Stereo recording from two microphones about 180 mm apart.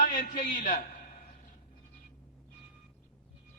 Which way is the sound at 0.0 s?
45° left (ahead or behind).